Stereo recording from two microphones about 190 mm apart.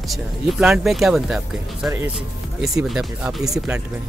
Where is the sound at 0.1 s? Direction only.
Centre (ahead or behind).